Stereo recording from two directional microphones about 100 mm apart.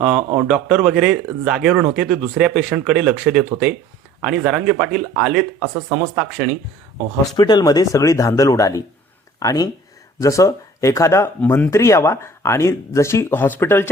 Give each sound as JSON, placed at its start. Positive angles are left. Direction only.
{"t": 0.0, "sound": "speech", "side_deg": -15}
{"t": 7.3, "sound": "speech", "side_deg": 45}